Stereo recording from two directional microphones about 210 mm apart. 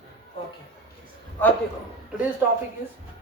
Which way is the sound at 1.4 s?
10° left (ahead or behind).